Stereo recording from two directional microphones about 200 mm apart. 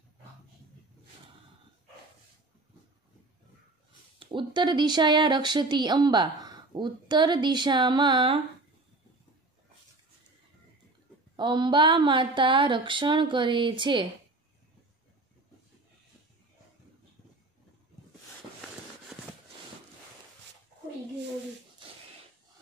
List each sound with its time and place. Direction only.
4.2 s speech: 25° right (ahead or behind)
11.3 s speech: 25° right (ahead or behind)
19.1 s a sound: 5° right (ahead or behind)